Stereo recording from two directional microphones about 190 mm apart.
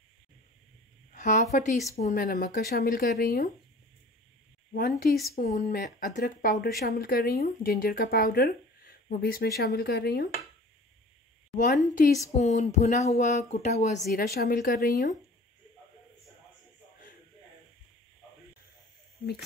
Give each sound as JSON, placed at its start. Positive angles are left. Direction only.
{"t": 1.1, "sound": "a woman's voice", "side_deg": 40}
{"t": 4.7, "sound": "speech", "side_deg": 55}
{"t": 11.5, "sound": "speech", "side_deg": 40}
{"t": 14.2, "sound": "speech", "side_deg": 55}